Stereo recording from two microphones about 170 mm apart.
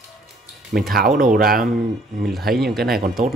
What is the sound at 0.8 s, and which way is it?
Speech, 60° right (ahead or behind).